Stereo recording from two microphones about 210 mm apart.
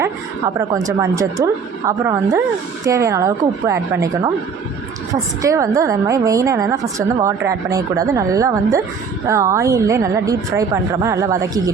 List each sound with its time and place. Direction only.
0.0 s a woman's voice: 15° right (ahead or behind)
5.4 s a woman's voice: 15° right (ahead or behind)